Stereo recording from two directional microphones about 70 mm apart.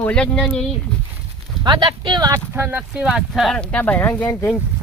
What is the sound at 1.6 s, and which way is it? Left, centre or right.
Speech, right.